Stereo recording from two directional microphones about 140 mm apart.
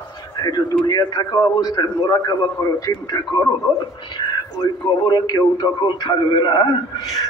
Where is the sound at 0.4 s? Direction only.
30° left (ahead or behind).